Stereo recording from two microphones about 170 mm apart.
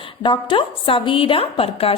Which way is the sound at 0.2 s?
30° left (ahead or behind).